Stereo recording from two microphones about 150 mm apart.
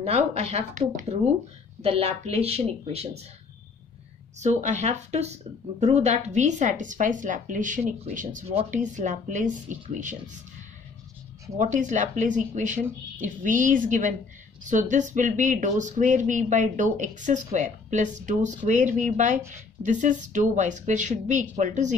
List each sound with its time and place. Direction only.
0.0 s speech: 45° right (ahead or behind)
4.4 s speech: 50° right (ahead or behind)
11.5 s speech: 55° right (ahead or behind)